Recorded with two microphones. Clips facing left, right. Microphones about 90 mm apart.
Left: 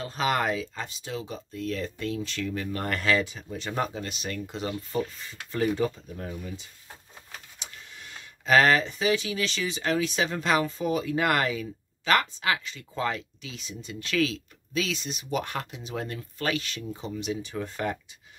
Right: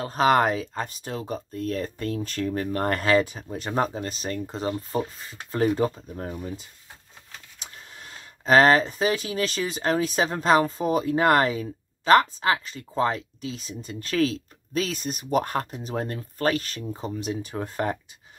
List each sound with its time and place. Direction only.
0.0 s speech: 45° right (ahead or behind)